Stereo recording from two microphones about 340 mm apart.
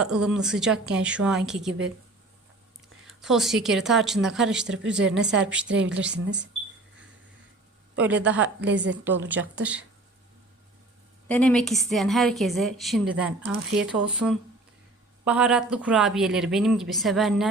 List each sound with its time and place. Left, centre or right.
0.0 s a woman's voice: centre
3.1 s a woman's voice: centre
5.6 s a woman's voice: right
5.9 s a woman's voice: centre
7.9 s a woman's voice: centre
8.4 s a woman's voice: right
9.6 s a woman's voice: centre
11.3 s a woman's voice: centre